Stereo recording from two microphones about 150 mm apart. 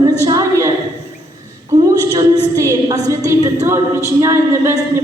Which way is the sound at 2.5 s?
25° right (ahead or behind).